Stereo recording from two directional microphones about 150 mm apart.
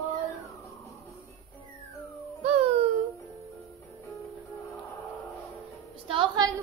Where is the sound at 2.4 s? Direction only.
45° right (ahead or behind).